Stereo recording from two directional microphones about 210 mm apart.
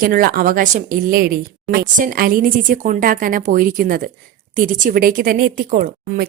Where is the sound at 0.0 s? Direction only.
45° right (ahead or behind).